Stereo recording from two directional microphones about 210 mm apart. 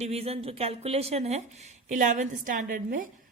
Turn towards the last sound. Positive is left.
turn(degrees=-40)  # may be behind; listen again after turning